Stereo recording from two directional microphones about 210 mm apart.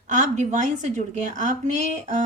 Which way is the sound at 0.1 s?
35° right (ahead or behind).